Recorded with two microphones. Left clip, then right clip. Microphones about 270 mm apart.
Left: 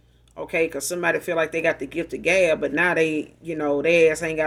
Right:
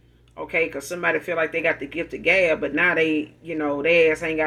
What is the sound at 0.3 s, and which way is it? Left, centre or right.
Speech, left.